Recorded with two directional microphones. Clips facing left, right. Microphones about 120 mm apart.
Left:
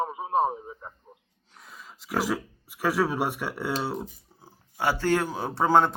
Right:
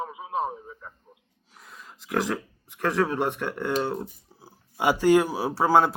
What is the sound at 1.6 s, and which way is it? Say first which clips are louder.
Speech: even; centre (ahead or behind).